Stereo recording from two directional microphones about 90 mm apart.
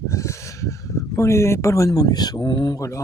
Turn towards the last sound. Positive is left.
turn(degrees=35)  # may be behind; listen again after turning